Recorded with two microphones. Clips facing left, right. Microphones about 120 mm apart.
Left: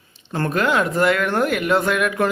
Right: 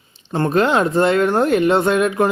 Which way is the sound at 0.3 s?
25° right (ahead or behind).